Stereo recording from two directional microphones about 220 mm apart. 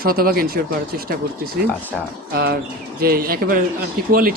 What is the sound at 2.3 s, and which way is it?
Speech, 45° right (ahead or behind).